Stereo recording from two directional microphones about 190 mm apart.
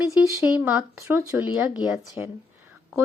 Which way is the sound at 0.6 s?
10° right (ahead or behind).